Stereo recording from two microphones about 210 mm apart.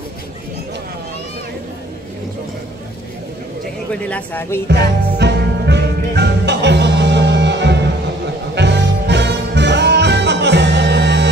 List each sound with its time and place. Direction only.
3.9 s speech: 5° left (ahead or behind)
4.6 s music: 55° right (ahead or behind)